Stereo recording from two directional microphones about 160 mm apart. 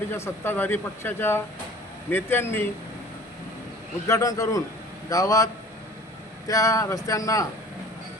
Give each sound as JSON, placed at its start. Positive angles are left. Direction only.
{"t": 0.1, "sound": "speech", "side_deg": 15}
{"t": 4.0, "sound": "speech", "side_deg": 20}
{"t": 6.5, "sound": "speech", "side_deg": 20}